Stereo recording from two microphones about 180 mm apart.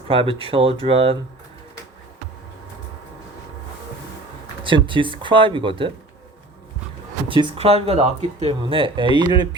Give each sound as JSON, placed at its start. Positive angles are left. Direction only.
{"t": 0.1, "sound": "speech", "side_deg": -30}
{"t": 4.6, "sound": "speech", "side_deg": -25}
{"t": 7.3, "sound": "speech", "side_deg": -30}